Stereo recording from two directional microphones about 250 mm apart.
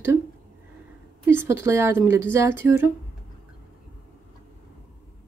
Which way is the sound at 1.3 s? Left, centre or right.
Centre.